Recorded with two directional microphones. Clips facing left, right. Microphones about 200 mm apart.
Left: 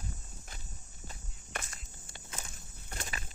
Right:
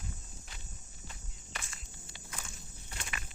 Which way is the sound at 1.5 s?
45° left (ahead or behind).